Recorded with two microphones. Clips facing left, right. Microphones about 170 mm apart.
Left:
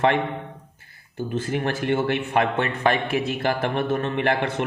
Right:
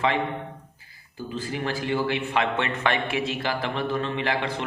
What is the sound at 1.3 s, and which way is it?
A man's voice, 60° left (ahead or behind).